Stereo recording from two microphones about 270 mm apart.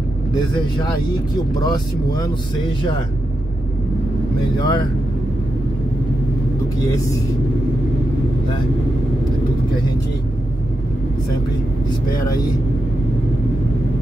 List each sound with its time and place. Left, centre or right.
1.6 s speech: centre
4.6 s speech: centre